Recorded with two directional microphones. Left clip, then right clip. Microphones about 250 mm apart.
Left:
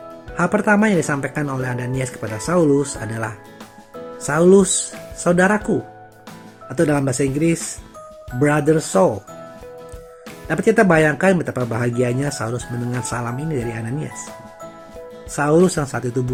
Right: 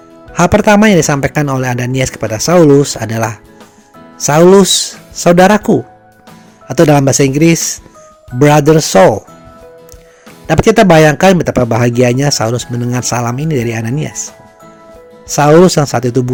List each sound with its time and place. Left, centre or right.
0.3 s speech: right
10.5 s speech: right
15.3 s speech: right